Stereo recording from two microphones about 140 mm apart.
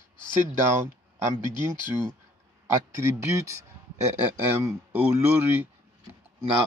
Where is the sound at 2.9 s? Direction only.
20° right (ahead or behind).